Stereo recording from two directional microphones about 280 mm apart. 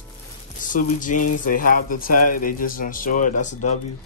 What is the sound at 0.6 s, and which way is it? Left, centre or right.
Speech, left.